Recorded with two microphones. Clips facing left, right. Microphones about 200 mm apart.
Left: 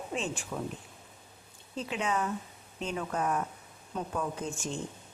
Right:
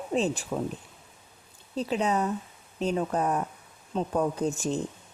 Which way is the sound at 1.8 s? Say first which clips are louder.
Right 5 dB; 35° right (ahead or behind).